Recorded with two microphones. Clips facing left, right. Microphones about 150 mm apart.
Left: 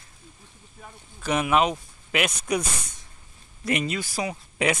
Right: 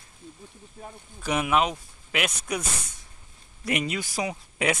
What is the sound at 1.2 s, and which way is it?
Speech, 5° right (ahead or behind).